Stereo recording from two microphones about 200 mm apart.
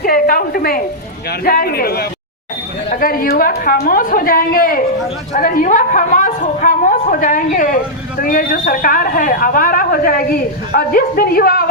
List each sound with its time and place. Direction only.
0.0 s a man's voice: 45° left (ahead or behind)